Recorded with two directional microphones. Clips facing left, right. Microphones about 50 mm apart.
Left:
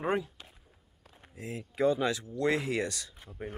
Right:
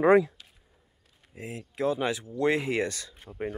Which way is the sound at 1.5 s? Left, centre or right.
Centre.